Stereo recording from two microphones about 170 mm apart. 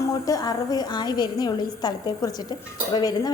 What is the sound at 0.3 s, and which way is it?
Speech, 20° left (ahead or behind).